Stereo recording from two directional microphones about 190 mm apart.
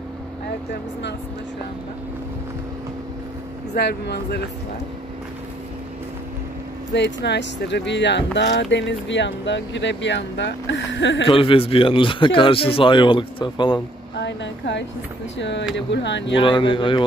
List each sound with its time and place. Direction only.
3.7 s speech: 60° left (ahead or behind)
6.9 s speech: 65° left (ahead or behind)
11.2 s a man's voice: 30° left (ahead or behind)
14.2 s speech: 65° left (ahead or behind)
16.3 s a man's voice: 25° left (ahead or behind)